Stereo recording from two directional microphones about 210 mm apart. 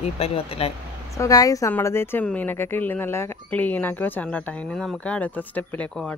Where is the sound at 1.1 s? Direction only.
15° left (ahead or behind).